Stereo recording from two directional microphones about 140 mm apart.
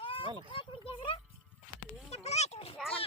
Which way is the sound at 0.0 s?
40° left (ahead or behind).